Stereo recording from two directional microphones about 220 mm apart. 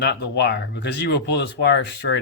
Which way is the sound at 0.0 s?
50° left (ahead or behind).